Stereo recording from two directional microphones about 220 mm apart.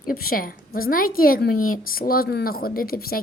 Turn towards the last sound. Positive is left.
turn(degrees=45)  # may be behind; listen again after turning